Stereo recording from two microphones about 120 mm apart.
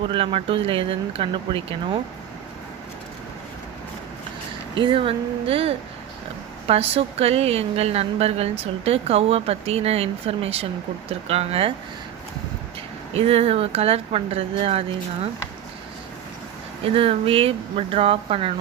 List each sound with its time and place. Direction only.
0.1 s speech: 50° right (ahead or behind)
4.7 s a woman's voice: 45° right (ahead or behind)
13.1 s a woman's voice: 55° right (ahead or behind)
16.8 s speech: 50° right (ahead or behind)